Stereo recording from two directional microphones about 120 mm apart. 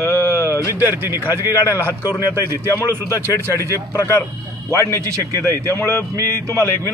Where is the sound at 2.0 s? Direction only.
30° left (ahead or behind).